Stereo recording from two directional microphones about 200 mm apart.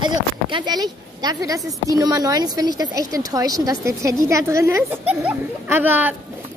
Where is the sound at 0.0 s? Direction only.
25° right (ahead or behind).